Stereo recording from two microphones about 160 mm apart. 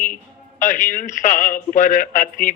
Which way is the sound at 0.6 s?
55° left (ahead or behind).